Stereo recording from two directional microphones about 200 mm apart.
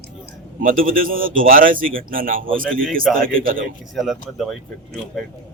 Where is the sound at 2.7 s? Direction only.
5° left (ahead or behind).